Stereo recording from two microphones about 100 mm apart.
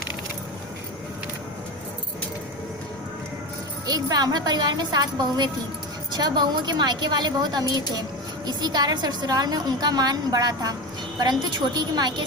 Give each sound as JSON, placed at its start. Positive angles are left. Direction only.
{"t": 3.8, "sound": "a woman's voice", "side_deg": -40}